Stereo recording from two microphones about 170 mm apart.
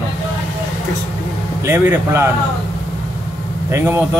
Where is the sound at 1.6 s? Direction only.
15° right (ahead or behind).